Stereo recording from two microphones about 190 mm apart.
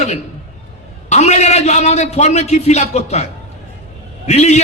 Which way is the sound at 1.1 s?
35° left (ahead or behind).